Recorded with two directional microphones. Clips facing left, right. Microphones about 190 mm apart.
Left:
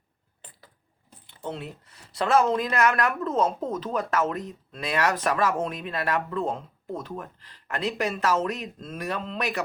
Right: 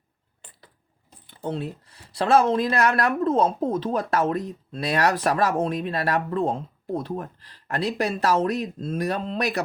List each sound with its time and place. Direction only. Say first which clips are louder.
1.5 s speech: right 6 dB; 30° right (ahead or behind)